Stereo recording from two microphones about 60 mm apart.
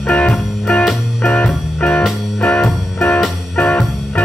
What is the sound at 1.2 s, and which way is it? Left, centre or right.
Music, left.